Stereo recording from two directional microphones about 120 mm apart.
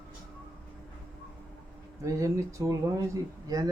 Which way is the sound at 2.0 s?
25° right (ahead or behind).